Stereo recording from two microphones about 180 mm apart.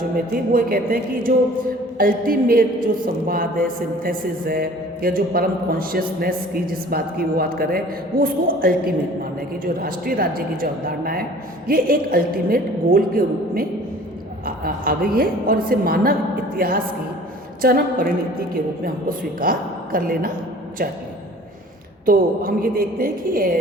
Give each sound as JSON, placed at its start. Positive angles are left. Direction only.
{"t": 0.5, "sound": "a woman's voice", "side_deg": -55}
{"t": 22.0, "sound": "speech", "side_deg": -55}